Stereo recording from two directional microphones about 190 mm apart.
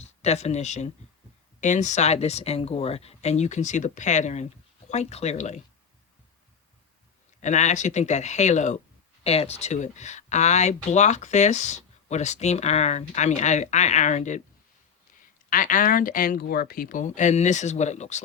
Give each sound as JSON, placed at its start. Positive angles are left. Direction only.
{"t": 0.0, "sound": "speech", "side_deg": 35}
{"t": 7.4, "sound": "speech", "side_deg": 40}
{"t": 15.4, "sound": "speech", "side_deg": 45}